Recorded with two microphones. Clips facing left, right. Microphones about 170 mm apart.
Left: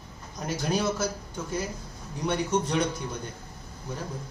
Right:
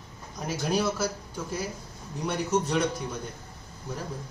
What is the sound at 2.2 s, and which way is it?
Speech, 5° right (ahead or behind).